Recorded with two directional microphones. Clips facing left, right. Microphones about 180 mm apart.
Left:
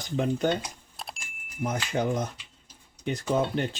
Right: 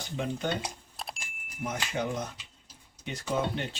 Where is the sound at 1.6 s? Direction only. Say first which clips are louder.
Left 4 dB; 40° left (ahead or behind).